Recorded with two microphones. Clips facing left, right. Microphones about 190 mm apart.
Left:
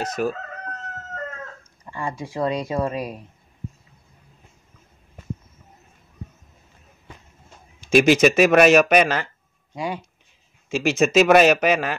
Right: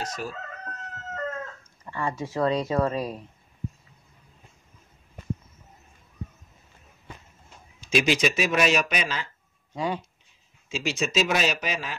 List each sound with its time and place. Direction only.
0.0 s speech: 55° left (ahead or behind)
1.9 s speech: 15° left (ahead or behind)
7.9 s speech: 50° left (ahead or behind)
9.8 s speech: 10° left (ahead or behind)
10.7 s speech: 50° left (ahead or behind)